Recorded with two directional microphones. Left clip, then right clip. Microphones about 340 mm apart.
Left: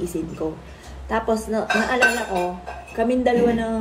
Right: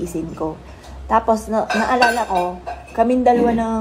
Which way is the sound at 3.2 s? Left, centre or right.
Centre.